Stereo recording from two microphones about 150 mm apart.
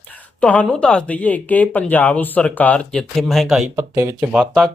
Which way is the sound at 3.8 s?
20° right (ahead or behind).